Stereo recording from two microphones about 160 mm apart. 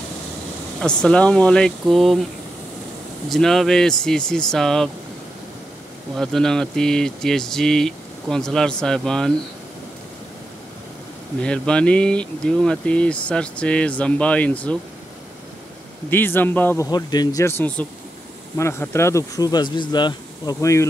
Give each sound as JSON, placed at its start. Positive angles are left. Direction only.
{"t": 0.7, "sound": "speech", "side_deg": 5}
{"t": 3.3, "sound": "speech", "side_deg": 0}
{"t": 6.1, "sound": "speech", "side_deg": 5}
{"t": 11.4, "sound": "speech", "side_deg": 5}
{"t": 16.1, "sound": "speech", "side_deg": 15}